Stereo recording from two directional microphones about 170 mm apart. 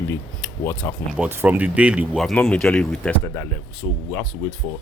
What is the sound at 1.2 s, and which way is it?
Speech, 10° right (ahead or behind).